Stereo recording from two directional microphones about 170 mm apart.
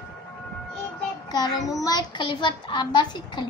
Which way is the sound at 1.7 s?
20° left (ahead or behind).